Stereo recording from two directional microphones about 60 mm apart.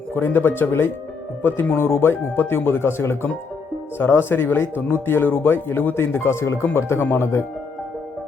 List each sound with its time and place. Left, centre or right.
0.1 s speech: left